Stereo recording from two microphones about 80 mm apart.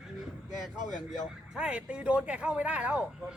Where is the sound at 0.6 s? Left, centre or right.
Centre.